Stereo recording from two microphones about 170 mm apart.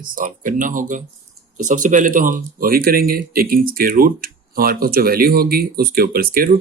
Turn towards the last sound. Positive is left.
turn(degrees=-60)  # may be behind; listen again after turning